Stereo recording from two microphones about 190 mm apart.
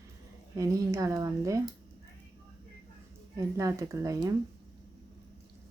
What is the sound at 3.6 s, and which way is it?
Speech, 15° right (ahead or behind).